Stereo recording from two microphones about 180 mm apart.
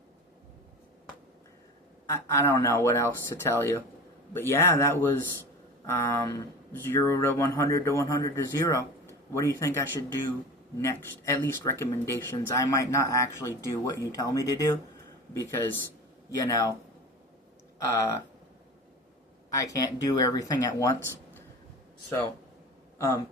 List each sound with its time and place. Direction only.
2.0 s speech: 15° left (ahead or behind)
17.8 s speech: 20° left (ahead or behind)
19.5 s speech: 20° left (ahead or behind)
23.0 s speech: 15° left (ahead or behind)